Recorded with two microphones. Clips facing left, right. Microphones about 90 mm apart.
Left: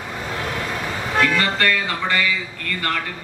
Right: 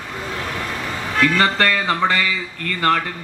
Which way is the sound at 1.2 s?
40° right (ahead or behind).